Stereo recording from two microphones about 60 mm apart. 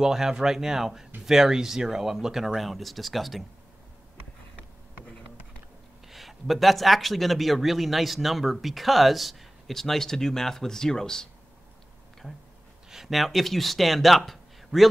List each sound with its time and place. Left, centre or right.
0.0 s speech: centre
6.0 s speech: centre
12.9 s speech: centre